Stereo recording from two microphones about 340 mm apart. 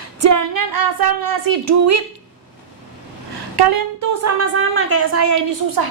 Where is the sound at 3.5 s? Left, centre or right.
Right.